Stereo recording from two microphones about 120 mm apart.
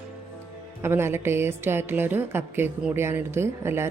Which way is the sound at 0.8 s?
20° right (ahead or behind).